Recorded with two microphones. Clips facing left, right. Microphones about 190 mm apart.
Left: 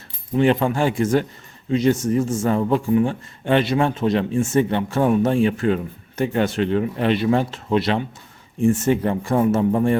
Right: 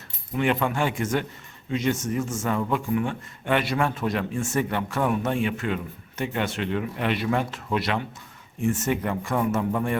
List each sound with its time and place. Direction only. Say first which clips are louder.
0.3 s a man's voice: left 6 dB; 30° left (ahead or behind)